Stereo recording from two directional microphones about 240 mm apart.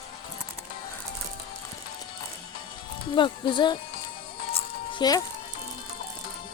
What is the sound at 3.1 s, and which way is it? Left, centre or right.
Speech, centre.